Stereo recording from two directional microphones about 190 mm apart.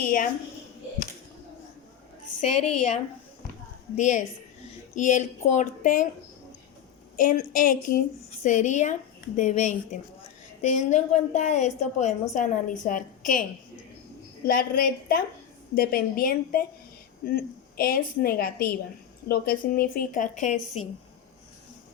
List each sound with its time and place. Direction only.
0.0 s a woman's voice: 45° left (ahead or behind)
3.9 s a woman's voice: 40° left (ahead or behind)
7.2 s a woman's voice: 45° left (ahead or behind)
14.4 s a woman's voice: 50° left (ahead or behind)